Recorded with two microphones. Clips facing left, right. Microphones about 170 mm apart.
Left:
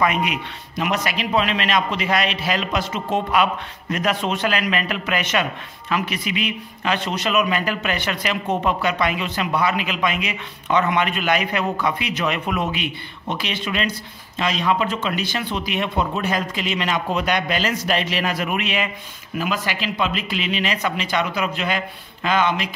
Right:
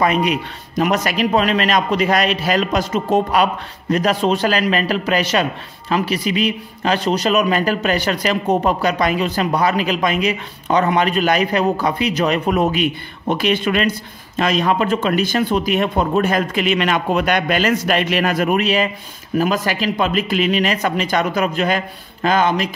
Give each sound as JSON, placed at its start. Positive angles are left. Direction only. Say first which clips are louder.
{"t": 0.0, "sound": "a man's voice", "louder": "right 4 dB", "side_deg": -35}